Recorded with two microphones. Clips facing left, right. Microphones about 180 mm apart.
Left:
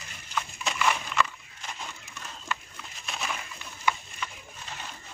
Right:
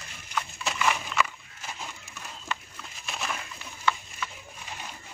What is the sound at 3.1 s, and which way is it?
Bird, centre (ahead or behind).